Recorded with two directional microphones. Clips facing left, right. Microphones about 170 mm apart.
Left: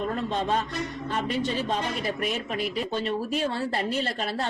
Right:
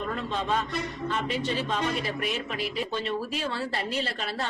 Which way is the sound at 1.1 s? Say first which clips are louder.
Left 2 dB; 45° left (ahead or behind).